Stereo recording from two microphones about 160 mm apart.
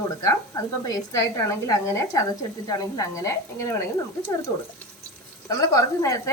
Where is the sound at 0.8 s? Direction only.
20° left (ahead or behind).